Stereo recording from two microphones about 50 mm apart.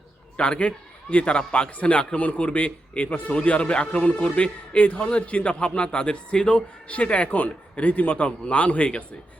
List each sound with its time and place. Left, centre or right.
0.3 s a man's voice: centre